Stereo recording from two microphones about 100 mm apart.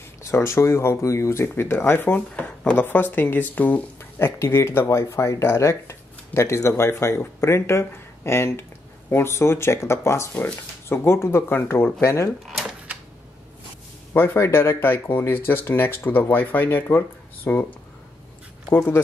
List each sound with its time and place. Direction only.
0.2 s speech: 25° left (ahead or behind)
12.4 s cash register: centre (ahead or behind)
14.1 s speech: 25° left (ahead or behind)
18.7 s speech: 25° left (ahead or behind)